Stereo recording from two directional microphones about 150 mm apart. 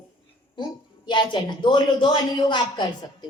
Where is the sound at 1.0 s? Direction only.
30° left (ahead or behind).